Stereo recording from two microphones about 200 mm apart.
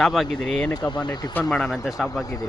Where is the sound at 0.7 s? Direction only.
20° left (ahead or behind).